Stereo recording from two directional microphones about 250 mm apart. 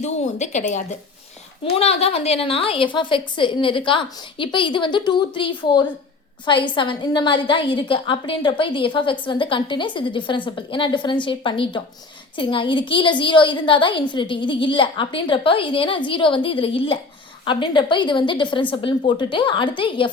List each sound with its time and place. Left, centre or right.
0.0 s speech: left
1.6 s a woman's voice: left